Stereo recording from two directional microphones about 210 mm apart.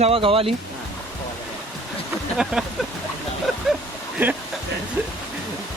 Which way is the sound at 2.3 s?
5° right (ahead or behind).